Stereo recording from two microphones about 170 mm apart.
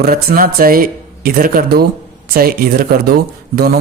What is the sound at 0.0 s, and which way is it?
Speech, 60° right (ahead or behind).